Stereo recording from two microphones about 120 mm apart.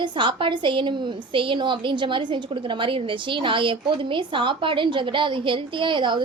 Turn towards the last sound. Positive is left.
turn(degrees=-40)  # may be behind; listen again after turning